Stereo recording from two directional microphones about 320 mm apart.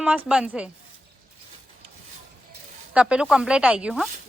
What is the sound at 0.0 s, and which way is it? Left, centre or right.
Speech, centre.